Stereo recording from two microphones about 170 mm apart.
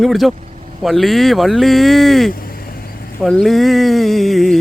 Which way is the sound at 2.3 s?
60° left (ahead or behind).